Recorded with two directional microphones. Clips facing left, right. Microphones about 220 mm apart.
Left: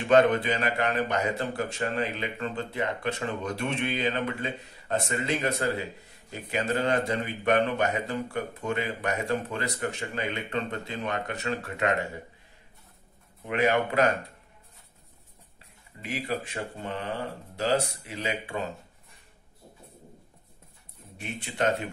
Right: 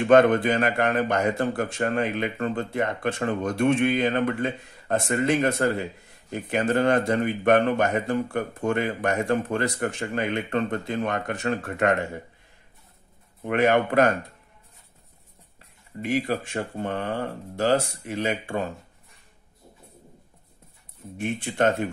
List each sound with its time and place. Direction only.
0.0 s a man's voice: 50° right (ahead or behind)
13.4 s a man's voice: 50° right (ahead or behind)
16.0 s a man's voice: 50° right (ahead or behind)
21.2 s a man's voice: 50° right (ahead or behind)